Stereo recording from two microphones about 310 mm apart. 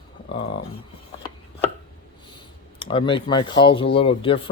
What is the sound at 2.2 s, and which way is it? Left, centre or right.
Speech, centre.